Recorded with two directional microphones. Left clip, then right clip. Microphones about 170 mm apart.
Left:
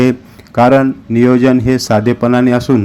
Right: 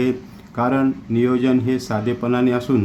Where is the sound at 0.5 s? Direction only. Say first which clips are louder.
Left 11 dB; 35° left (ahead or behind).